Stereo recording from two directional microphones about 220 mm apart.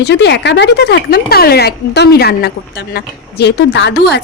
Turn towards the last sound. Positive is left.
turn(degrees=50)  # may be behind; listen again after turning